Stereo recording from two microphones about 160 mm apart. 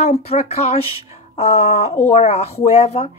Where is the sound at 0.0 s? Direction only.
40° left (ahead or behind).